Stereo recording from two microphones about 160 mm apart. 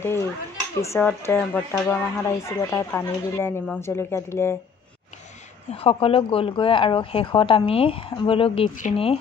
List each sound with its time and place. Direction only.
0.0 s speech: 15° left (ahead or behind)
5.7 s speech: 35° left (ahead or behind)